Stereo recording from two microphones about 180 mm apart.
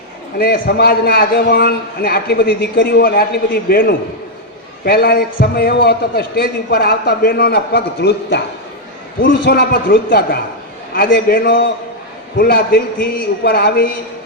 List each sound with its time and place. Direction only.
0.3 s a man's voice: 55° left (ahead or behind)